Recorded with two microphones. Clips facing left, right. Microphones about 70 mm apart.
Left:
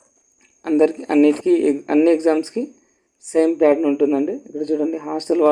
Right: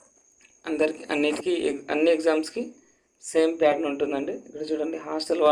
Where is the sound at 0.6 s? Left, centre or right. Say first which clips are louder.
Left 9 dB; left.